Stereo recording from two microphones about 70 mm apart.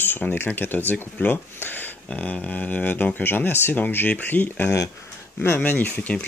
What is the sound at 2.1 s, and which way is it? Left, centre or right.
Speech, centre.